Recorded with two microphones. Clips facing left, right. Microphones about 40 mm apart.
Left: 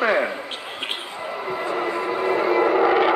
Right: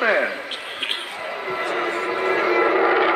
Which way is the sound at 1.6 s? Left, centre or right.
Right.